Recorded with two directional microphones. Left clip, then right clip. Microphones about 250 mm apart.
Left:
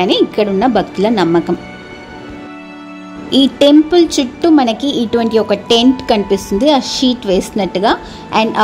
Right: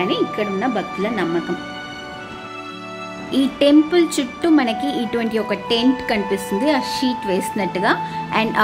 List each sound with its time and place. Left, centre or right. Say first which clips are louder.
0.0 s a woman's voice: left 8 dB; left
3.3 s a woman's voice: left 7 dB; centre